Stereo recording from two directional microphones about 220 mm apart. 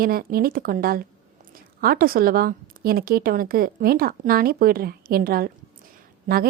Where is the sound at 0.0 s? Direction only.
40° right (ahead or behind).